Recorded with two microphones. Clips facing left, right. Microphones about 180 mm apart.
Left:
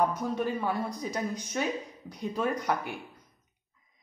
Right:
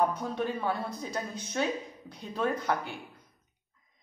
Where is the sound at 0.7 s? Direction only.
15° left (ahead or behind).